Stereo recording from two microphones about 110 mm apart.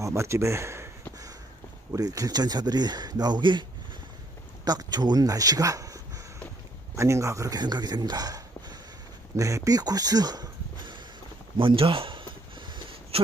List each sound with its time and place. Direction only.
0.0 s speech: 25° right (ahead or behind)
1.9 s speech: 30° right (ahead or behind)
11.5 s a sound: 50° right (ahead or behind)